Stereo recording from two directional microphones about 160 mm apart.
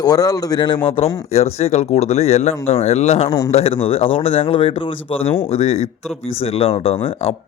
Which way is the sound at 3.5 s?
40° left (ahead or behind).